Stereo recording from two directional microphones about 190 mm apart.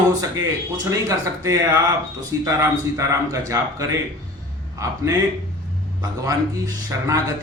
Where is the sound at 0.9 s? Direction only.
15° right (ahead or behind).